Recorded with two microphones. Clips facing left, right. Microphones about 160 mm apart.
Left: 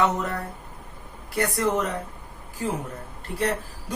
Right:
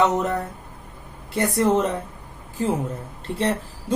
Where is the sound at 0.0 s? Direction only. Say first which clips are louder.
Right 4 dB; 20° right (ahead or behind).